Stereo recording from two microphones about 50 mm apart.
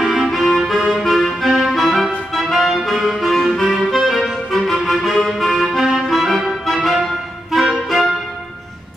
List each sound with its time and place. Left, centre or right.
0.0 s music: centre
2.3 s clarinet: centre
7.7 s music: centre